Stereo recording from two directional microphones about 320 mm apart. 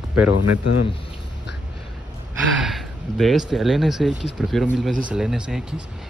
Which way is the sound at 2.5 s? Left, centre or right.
Centre.